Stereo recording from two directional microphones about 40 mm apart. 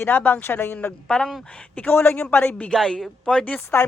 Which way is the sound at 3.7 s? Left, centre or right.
Left.